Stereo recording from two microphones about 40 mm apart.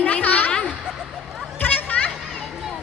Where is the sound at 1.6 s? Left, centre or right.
Left.